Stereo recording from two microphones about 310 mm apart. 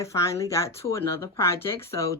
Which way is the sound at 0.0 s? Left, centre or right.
Centre.